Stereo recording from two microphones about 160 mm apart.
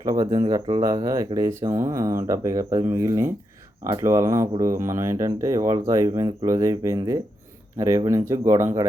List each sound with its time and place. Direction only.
0.0 s speech: 25° right (ahead or behind)